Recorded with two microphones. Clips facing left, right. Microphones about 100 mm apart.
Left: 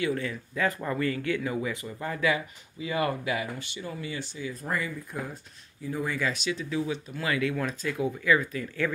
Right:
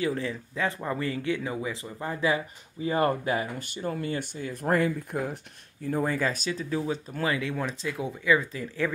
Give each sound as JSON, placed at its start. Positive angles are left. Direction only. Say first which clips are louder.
{"t": 0.0, "sound": "speech", "louder": "right 1 dB", "side_deg": -30}